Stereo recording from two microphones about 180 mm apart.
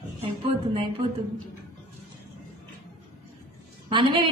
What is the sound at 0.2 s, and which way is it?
Speech, 30° right (ahead or behind).